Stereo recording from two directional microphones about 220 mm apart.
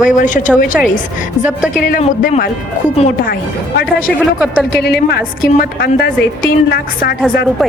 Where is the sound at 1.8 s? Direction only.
40° left (ahead or behind).